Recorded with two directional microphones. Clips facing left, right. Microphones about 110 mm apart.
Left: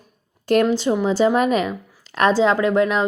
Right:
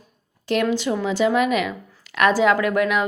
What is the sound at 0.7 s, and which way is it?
A woman's voice, 30° left (ahead or behind).